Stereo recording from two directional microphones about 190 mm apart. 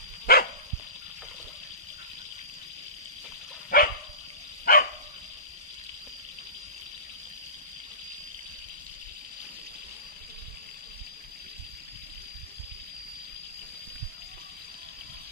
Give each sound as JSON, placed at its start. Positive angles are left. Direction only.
{"t": 0.3, "sound": "dog", "side_deg": 55}
{"t": 3.7, "sound": "dog", "side_deg": 50}